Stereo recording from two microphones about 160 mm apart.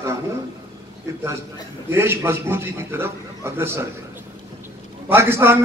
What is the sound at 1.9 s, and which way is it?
A man's voice, 15° right (ahead or behind).